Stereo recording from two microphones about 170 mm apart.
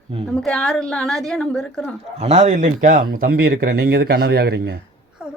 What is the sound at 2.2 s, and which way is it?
Speech, 40° right (ahead or behind).